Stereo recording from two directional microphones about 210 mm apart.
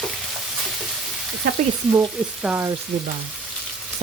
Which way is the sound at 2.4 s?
5° right (ahead or behind).